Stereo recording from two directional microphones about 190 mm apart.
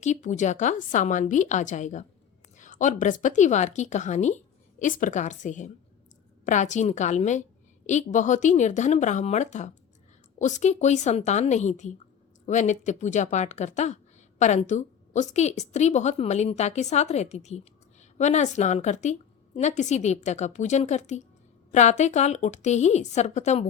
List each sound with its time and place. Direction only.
0.0 s speech: 40° left (ahead or behind)